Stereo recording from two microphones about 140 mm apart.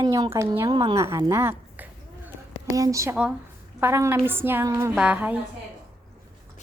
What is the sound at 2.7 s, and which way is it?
Speech, 25° right (ahead or behind).